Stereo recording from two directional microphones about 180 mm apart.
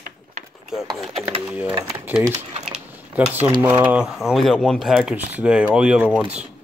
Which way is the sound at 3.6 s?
10° right (ahead or behind).